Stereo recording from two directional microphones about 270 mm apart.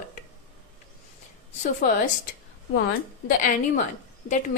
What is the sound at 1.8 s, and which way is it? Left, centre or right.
A woman's voice, left.